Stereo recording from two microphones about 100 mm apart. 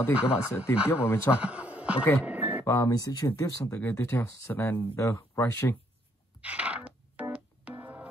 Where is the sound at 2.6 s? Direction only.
30° left (ahead or behind).